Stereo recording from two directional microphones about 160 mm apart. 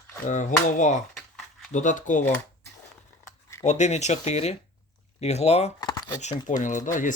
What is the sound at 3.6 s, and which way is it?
Speech, 45° left (ahead or behind).